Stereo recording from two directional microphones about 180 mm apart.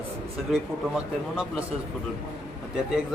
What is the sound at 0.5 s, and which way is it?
Speech, 5° right (ahead or behind).